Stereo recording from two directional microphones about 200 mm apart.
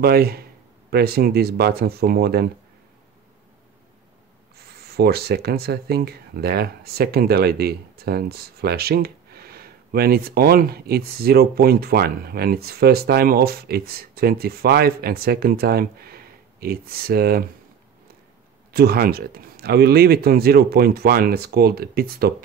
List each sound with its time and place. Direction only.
0.0 s speech: 50° right (ahead or behind)
4.6 s speech: 50° right (ahead or behind)
18.7 s speech: 50° right (ahead or behind)